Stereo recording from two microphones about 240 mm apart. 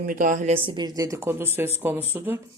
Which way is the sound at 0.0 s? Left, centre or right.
Right.